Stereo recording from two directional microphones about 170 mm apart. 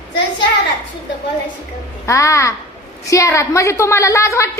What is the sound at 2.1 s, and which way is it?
A woman's voice, 15° left (ahead or behind).